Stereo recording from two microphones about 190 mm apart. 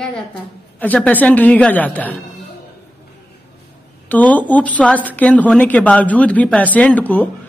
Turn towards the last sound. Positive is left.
turn(degrees=10)  # may be behind; listen again after turning